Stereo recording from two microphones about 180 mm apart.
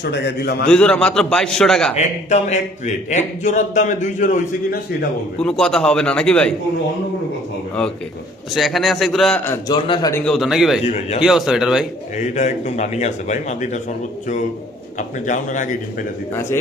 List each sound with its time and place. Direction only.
0.0 s a man's voice: 70° left (ahead or behind)
0.7 s a man's voice: 5° left (ahead or behind)
2.0 s speech: 40° left (ahead or behind)
5.4 s a man's voice: 5° left (ahead or behind)
8.5 s a man's voice: centre (ahead or behind)
9.5 s a man's voice: 25° left (ahead or behind)
10.2 s a man's voice: centre (ahead or behind)
10.8 s speech: 35° left (ahead or behind)
11.2 s a man's voice: 5° right (ahead or behind)
12.1 s speech: 40° left (ahead or behind)
14.9 s a man's voice: 45° left (ahead or behind)
16.3 s a man's voice: 15° left (ahead or behind)